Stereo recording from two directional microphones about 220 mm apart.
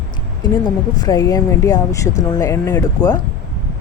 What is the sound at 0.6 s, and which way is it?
Speech, 15° left (ahead or behind).